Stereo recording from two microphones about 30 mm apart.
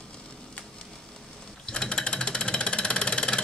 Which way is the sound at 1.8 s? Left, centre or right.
Left.